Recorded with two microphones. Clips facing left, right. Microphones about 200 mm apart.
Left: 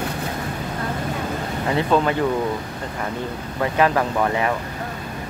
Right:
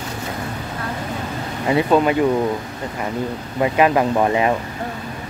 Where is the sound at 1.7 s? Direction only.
10° right (ahead or behind).